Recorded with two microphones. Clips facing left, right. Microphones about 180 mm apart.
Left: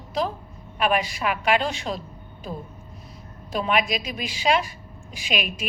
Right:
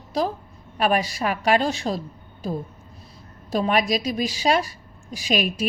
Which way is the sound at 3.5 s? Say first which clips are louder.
Right 3 dB; 40° right (ahead or behind).